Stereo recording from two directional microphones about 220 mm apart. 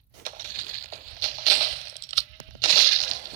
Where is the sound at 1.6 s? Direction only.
65° right (ahead or behind).